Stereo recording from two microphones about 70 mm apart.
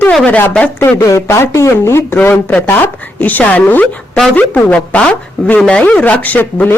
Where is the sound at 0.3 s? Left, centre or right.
Left.